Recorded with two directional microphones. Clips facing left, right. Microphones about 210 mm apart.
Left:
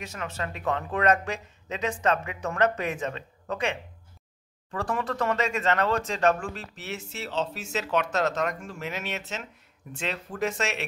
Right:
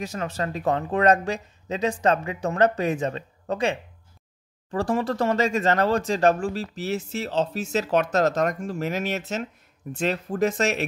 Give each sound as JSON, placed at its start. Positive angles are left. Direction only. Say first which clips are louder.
{"t": 0.0, "sound": "speech", "louder": "right 6 dB", "side_deg": -35}